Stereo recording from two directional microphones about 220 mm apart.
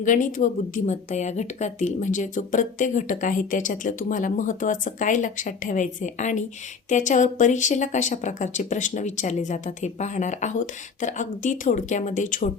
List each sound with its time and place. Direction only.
0.0 s speech: 35° left (ahead or behind)